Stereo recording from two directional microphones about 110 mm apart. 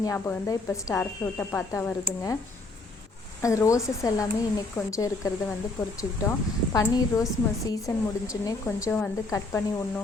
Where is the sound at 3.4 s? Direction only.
30° left (ahead or behind).